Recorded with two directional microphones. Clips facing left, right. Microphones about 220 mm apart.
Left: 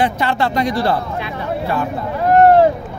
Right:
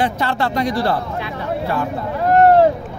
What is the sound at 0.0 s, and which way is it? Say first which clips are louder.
Speech: left 2 dB; 15° left (ahead or behind).